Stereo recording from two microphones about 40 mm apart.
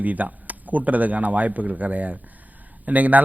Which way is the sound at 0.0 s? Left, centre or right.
Right.